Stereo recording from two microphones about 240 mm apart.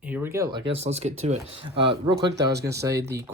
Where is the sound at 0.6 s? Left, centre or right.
Right.